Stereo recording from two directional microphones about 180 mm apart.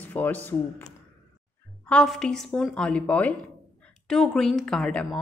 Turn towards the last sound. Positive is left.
turn(degrees=5)  # may be behind; listen again after turning